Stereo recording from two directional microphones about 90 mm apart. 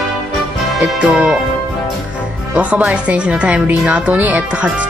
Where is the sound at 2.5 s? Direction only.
15° right (ahead or behind).